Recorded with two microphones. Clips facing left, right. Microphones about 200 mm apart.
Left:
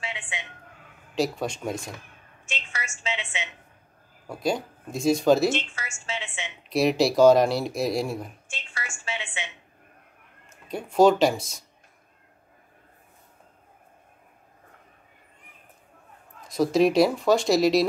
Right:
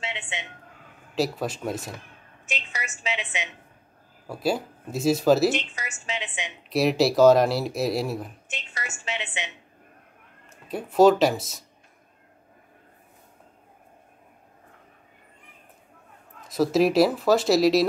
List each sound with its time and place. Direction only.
0.3 s a sound: 20° right (ahead or behind)
1.1 s speech: 5° right (ahead or behind)
2.4 s telephone: 15° right (ahead or behind)
3.0 s a woman's voice: 15° right (ahead or behind)
4.3 s speech: 5° right (ahead or behind)
5.5 s a woman's voice: 15° right (ahead or behind)
6.7 s speech: centre (ahead or behind)
8.5 s a woman's voice: 20° right (ahead or behind)
10.7 s speech: centre (ahead or behind)
16.4 s speech: centre (ahead or behind)